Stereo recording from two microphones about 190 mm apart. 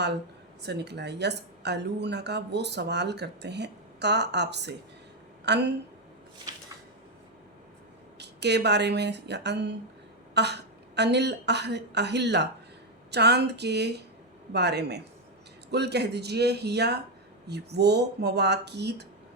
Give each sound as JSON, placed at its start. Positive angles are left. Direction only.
{"t": 0.6, "sound": "speech", "side_deg": -60}
{"t": 8.2, "sound": "speech", "side_deg": -65}